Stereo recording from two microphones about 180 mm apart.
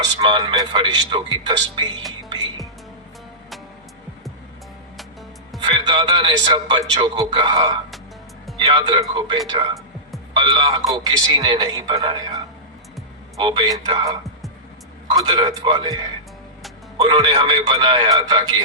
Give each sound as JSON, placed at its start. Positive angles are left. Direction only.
{"t": 0.0, "sound": "a man's voice", "side_deg": -25}
{"t": 5.6, "sound": "a man's voice", "side_deg": -25}
{"t": 17.0, "sound": "a man's voice", "side_deg": -25}